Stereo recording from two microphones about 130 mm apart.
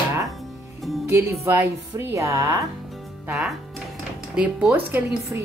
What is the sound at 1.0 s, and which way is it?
Speech, 20° right (ahead or behind).